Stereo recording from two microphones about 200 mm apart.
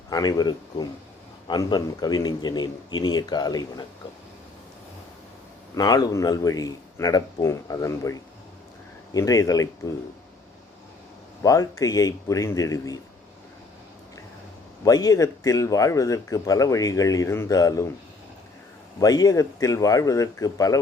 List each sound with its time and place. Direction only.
0.1 s a man's voice: 20° left (ahead or behind)
5.7 s speech: 20° left (ahead or behind)
11.4 s speech: 15° left (ahead or behind)
14.8 s speech: 15° left (ahead or behind)
18.9 s speech: 20° left (ahead or behind)